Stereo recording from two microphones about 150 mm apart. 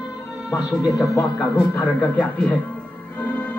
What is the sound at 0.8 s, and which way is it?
Speech, 20° left (ahead or behind).